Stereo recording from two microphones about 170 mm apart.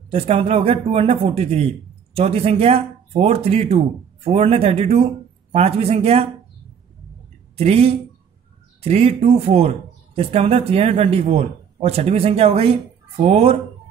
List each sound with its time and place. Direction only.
0.1 s speech: 35° right (ahead or behind)
7.5 s speech: 35° right (ahead or behind)